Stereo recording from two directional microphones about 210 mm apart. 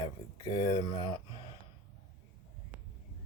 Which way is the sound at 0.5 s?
20° left (ahead or behind).